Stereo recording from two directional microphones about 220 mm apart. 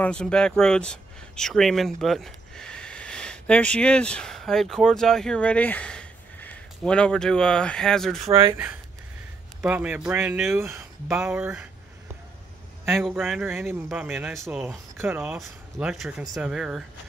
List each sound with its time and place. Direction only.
0.0 s speech: 5° left (ahead or behind)
8.3 s speech: 25° right (ahead or behind)
9.6 s speech: 5° right (ahead or behind)
13.0 s speech: 5° right (ahead or behind)